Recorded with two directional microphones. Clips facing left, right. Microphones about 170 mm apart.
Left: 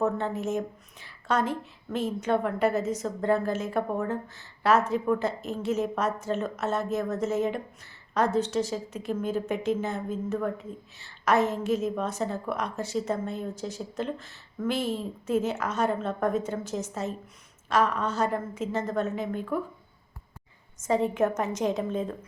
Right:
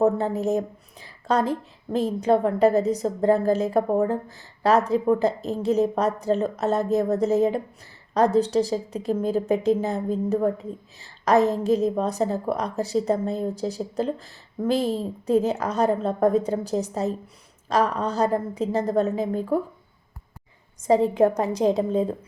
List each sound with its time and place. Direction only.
0.0 s a woman's voice: 35° right (ahead or behind)
20.8 s a woman's voice: 35° right (ahead or behind)